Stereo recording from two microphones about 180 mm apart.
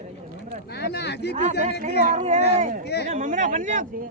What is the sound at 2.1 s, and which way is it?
Speech, 40° right (ahead or behind).